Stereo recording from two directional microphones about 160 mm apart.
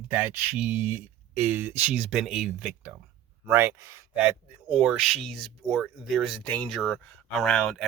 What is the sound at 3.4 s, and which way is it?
Speech, 15° right (ahead or behind).